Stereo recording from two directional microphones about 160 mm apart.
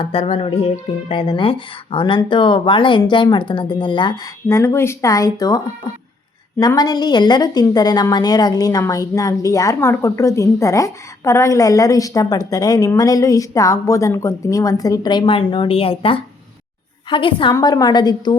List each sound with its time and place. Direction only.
0.0 s speech: 35° left (ahead or behind)
4.4 s speech: 15° left (ahead or behind)
6.6 s a woman's voice: 25° left (ahead or behind)